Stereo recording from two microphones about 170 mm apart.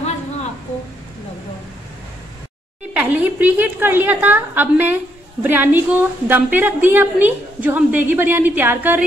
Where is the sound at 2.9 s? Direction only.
10° right (ahead or behind).